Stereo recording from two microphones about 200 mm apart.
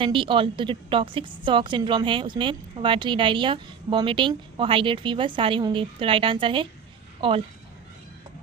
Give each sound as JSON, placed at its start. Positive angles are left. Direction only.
{"t": 0.0, "sound": "a woman's voice", "side_deg": -25}